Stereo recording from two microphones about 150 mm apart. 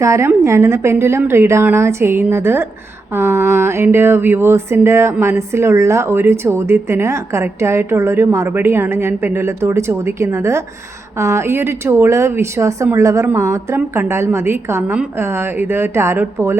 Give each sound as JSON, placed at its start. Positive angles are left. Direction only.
{"t": 0.0, "sound": "a woman's voice", "side_deg": -20}